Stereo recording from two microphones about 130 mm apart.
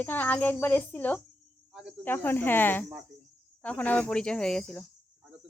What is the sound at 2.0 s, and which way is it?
Speech, 15° left (ahead or behind).